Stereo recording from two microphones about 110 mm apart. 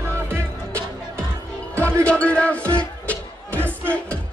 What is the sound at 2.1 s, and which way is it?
Music, 10° left (ahead or behind).